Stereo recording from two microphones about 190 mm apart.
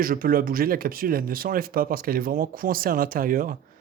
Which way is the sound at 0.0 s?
50° right (ahead or behind).